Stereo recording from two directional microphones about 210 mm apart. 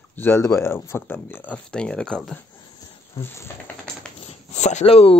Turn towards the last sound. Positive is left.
turn(degrees=30)  # may be behind; listen again after turning